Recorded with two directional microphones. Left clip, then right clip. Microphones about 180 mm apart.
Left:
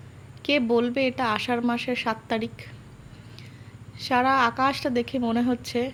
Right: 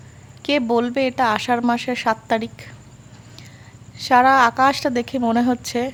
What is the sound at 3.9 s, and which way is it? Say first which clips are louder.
A woman's voice: right 8 dB; 25° right (ahead or behind).